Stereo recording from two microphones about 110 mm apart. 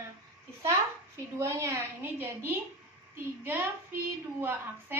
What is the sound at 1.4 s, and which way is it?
A woman's voice, 25° right (ahead or behind).